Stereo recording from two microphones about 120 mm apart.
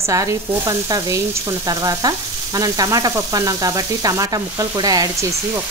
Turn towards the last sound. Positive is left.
turn(degrees=-35)  # may be behind; listen again after turning